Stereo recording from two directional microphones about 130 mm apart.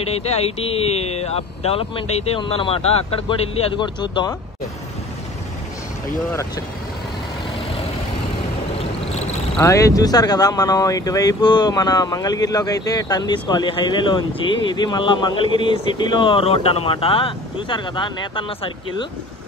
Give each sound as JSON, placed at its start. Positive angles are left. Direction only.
{"t": 0.1, "sound": "speech", "side_deg": 50}
{"t": 8.7, "sound": "vehicle", "side_deg": 55}
{"t": 9.6, "sound": "speech", "side_deg": 25}